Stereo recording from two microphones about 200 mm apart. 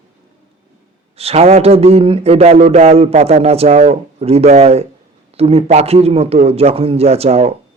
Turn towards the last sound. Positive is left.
turn(degrees=-30)  # may be behind; listen again after turning